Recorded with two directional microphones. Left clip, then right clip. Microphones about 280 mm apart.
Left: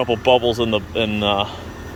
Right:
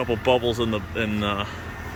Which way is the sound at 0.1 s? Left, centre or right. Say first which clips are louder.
Left 5 dB; right.